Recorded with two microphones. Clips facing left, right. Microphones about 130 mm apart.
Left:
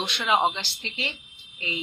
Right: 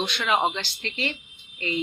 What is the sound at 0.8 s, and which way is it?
Speech, 15° left (ahead or behind).